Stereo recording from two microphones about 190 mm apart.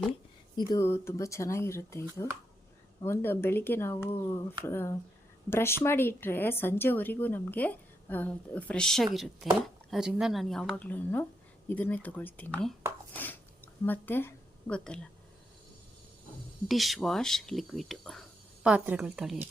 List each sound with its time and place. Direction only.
0.5 s a woman's voice: 20° left (ahead or behind)
13.8 s a woman's voice: 10° left (ahead or behind)
16.6 s speech: centre (ahead or behind)